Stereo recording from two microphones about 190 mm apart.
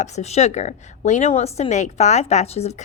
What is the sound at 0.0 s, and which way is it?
A woman's voice, 35° left (ahead or behind).